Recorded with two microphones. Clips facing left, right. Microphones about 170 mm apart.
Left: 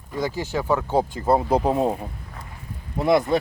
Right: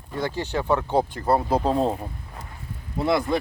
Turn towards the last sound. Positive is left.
turn(degrees=20)  # may be behind; listen again after turning